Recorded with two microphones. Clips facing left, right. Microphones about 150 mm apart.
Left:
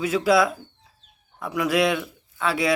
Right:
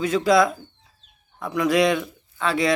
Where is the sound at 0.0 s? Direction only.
5° left (ahead or behind).